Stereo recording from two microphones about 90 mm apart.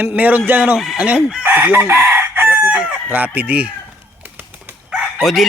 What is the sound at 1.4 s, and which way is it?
Chicken, 20° right (ahead or behind).